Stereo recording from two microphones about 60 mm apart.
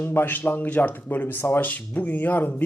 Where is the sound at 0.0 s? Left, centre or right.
Left.